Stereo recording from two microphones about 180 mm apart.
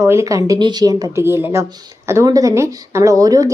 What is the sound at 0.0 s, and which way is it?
A woman's voice, 15° right (ahead or behind).